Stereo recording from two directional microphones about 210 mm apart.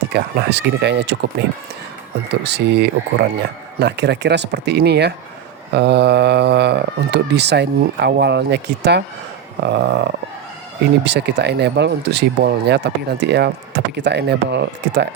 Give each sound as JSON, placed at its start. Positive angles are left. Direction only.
{"t": 0.1, "sound": "speech", "side_deg": -50}
{"t": 2.3, "sound": "speech", "side_deg": -55}
{"t": 9.6, "sound": "a sound", "side_deg": -55}
{"t": 11.0, "sound": "speech", "side_deg": -55}